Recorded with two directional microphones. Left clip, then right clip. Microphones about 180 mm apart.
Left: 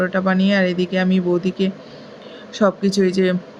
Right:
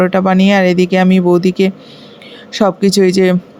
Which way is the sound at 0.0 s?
45° right (ahead or behind).